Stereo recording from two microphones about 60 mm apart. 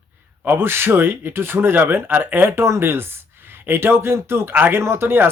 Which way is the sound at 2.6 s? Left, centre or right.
Right.